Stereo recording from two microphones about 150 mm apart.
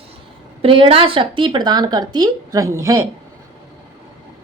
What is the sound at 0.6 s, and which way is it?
A woman's voice, 35° right (ahead or behind).